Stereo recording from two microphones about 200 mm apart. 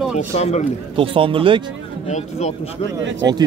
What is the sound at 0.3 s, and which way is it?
Speech, 35° left (ahead or behind).